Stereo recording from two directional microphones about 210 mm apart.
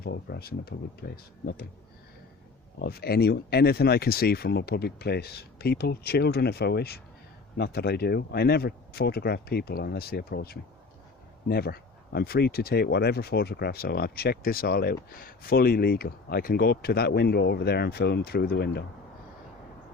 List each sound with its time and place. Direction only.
0.0 s speech: 50° left (ahead or behind)
2.7 s speech: 50° left (ahead or behind)